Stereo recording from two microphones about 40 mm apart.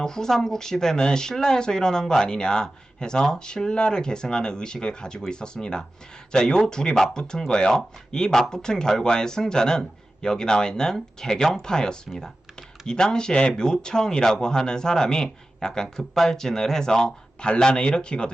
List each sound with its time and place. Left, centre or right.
0.0 s speech: centre